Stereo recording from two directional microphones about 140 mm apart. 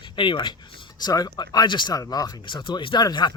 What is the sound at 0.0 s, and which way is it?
Speech, 35° left (ahead or behind).